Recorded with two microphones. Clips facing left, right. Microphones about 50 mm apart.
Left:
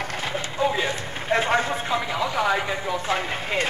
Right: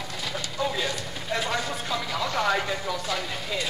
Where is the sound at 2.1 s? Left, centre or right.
Centre.